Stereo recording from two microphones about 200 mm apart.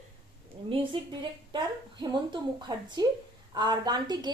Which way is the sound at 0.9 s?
25° right (ahead or behind).